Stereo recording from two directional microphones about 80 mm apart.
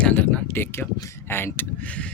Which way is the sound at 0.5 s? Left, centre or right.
Left.